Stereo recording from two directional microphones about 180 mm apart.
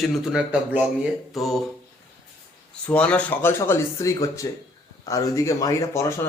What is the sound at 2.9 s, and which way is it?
A man's voice, 5° left (ahead or behind).